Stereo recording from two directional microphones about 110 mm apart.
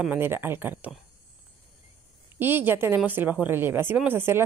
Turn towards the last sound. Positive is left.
turn(degrees=-20)  # may be behind; listen again after turning